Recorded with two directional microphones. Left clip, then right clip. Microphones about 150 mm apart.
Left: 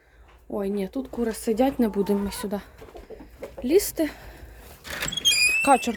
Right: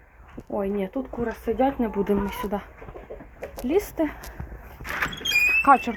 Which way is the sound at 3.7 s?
65° left (ahead or behind).